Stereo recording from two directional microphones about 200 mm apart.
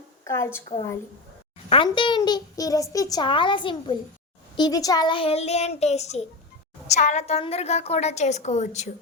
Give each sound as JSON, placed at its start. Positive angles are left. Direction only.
{"t": 0.3, "sound": "a woman's voice", "side_deg": 15}
{"t": 1.7, "sound": "a child's voice", "side_deg": 25}